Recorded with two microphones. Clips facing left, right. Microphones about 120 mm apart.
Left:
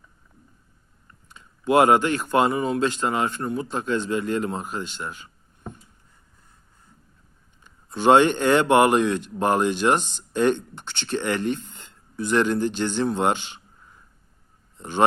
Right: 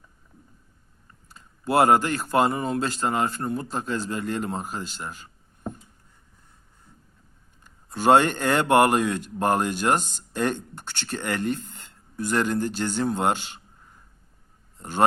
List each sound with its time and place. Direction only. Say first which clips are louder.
1.3 s a sound: left 4 dB; 35° right (ahead or behind)
2.5 s a man's voice: left 3 dB; 40° right (ahead or behind)
7.6 s speech: left 2 dB; 45° right (ahead or behind)
14.8 s a man's voice: left 2 dB; 45° right (ahead or behind)